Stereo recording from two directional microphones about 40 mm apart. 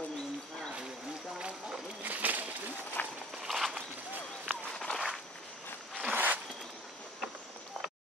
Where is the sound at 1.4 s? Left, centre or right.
Right.